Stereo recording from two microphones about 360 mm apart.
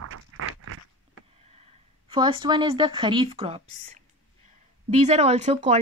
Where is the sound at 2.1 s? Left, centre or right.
Centre.